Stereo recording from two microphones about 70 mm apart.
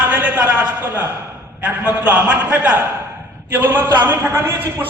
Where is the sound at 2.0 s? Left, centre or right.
Centre.